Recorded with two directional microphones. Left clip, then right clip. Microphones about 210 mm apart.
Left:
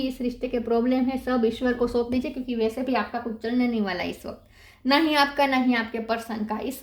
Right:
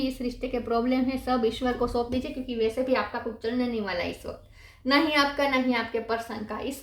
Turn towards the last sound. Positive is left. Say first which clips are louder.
# left 3 dB
turn(degrees=45)  # may be behind; listen again after turning